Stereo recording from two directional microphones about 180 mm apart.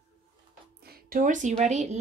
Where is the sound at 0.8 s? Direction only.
60° right (ahead or behind); by 2.0 s 40° right (ahead or behind).